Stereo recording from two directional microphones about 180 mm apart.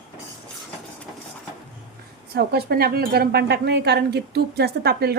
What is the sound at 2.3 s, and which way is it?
Speech, 65° right (ahead or behind).